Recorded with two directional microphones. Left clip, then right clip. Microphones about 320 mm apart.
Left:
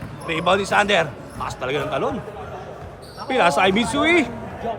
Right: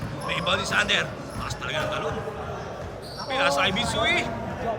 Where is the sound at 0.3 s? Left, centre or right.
Centre.